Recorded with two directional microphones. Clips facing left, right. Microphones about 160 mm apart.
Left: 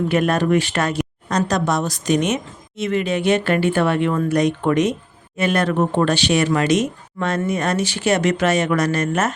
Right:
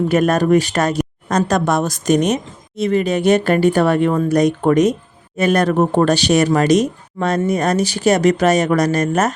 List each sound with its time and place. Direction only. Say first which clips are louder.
0.1 s speech: right 4 dB; 40° right (ahead or behind)